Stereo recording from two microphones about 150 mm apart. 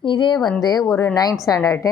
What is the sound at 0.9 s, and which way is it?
A woman's voice, 20° left (ahead or behind).